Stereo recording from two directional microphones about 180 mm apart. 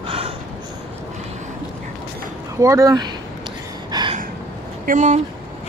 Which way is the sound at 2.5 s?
15° right (ahead or behind).